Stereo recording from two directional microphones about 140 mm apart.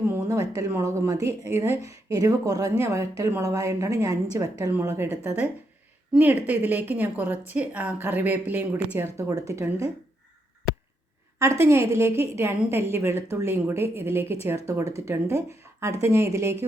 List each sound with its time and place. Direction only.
0.1 s a woman's voice: 25° right (ahead or behind)
11.3 s a woman's voice: 20° right (ahead or behind)